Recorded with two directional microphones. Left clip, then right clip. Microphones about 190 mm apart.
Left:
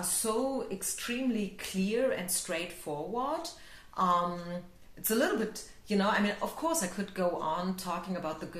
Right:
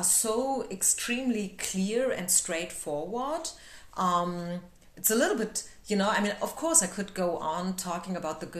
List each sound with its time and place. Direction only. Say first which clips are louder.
0.0 s a woman's voice: right 3 dB; 50° right (ahead or behind)